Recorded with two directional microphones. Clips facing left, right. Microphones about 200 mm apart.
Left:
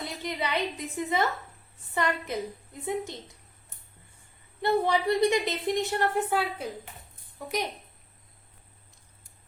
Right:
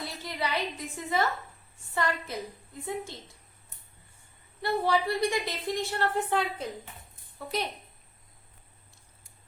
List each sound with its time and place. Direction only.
0.0 s a woman's voice: 20° left (ahead or behind)
4.6 s a woman's voice: 20° left (ahead or behind)
6.1 s a woman's voice: 10° left (ahead or behind)